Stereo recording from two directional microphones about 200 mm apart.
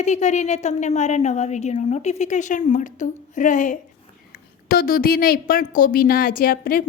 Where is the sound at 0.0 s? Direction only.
35° left (ahead or behind).